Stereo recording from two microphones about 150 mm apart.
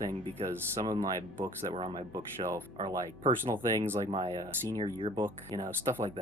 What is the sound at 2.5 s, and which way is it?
Speech, 20° right (ahead or behind).